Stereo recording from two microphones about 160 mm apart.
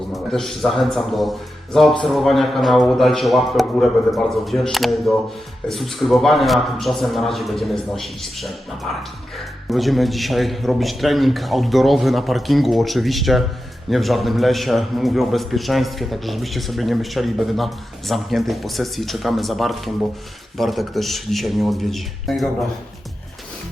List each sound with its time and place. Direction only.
0.1 s a man's voice: centre (ahead or behind)